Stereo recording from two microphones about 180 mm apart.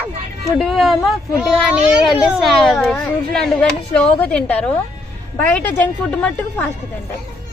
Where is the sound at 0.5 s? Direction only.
Centre (ahead or behind).